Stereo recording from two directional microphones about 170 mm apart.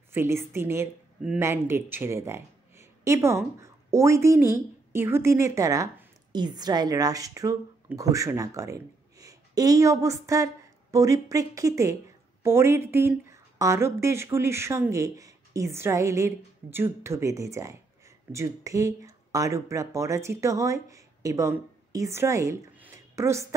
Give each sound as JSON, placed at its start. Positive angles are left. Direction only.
{"t": 0.1, "sound": "a woman's voice", "side_deg": -15}